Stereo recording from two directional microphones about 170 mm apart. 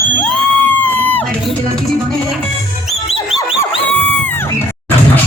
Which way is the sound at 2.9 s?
40° left (ahead or behind).